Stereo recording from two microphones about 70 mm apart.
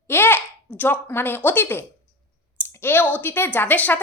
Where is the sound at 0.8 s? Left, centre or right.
Left.